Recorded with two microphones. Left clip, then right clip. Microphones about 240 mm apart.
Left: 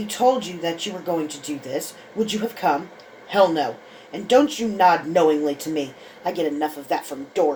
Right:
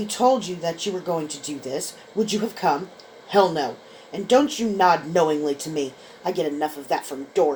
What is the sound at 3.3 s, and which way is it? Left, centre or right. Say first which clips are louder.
Speech: left 1 dB; right.